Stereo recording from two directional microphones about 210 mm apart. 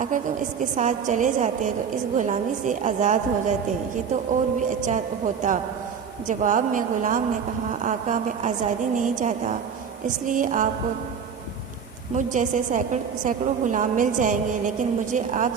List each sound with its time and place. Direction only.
0.1 s a woman's voice: 40° right (ahead or behind)
12.1 s a woman's voice: 35° right (ahead or behind)